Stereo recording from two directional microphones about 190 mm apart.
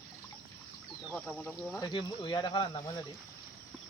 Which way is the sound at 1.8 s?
25° left (ahead or behind).